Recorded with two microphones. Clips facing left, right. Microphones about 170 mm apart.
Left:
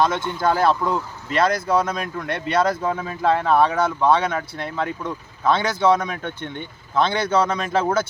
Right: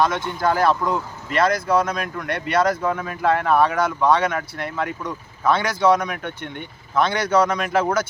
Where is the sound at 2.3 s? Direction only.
25° left (ahead or behind).